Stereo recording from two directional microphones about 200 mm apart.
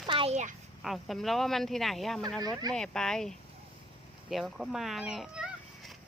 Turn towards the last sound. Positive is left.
turn(degrees=-5)  # may be behind; listen again after turning